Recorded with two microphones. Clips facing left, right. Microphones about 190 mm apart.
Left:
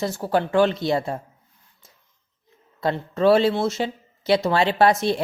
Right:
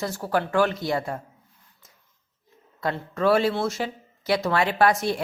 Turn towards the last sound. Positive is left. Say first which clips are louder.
# left 3 dB
turn(degrees=25)  # may be behind; listen again after turning